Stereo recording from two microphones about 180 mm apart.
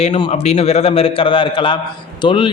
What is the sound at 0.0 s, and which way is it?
A man's voice, 30° left (ahead or behind).